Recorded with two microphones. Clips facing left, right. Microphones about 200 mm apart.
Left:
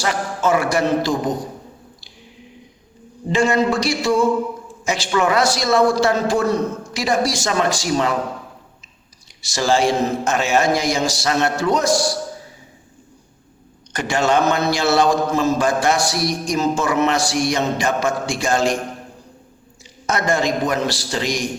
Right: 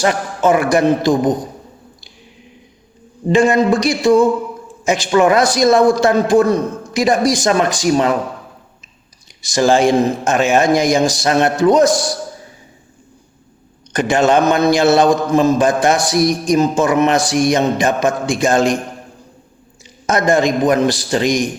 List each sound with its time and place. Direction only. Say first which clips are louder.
0.0 s a man's voice: right 5 dB; 20° right (ahead or behind)
3.3 s a man's voice: right 5 dB; 20° right (ahead or behind)
9.4 s a man's voice: right 5 dB; 15° right (ahead or behind)
13.9 s a man's voice: right 5 dB; 20° right (ahead or behind)
20.1 s a man's voice: right 5 dB; 20° right (ahead or behind)